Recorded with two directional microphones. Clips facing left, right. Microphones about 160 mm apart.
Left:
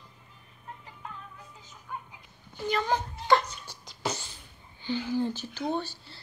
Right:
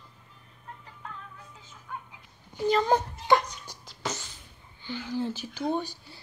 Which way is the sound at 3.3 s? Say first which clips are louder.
Right 1 dB; 15° right (ahead or behind).